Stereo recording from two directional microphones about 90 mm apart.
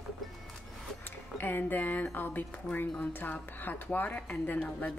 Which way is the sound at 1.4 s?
20° left (ahead or behind).